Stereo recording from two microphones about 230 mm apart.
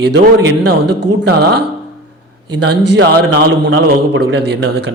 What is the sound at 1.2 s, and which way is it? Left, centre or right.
A man's voice, right.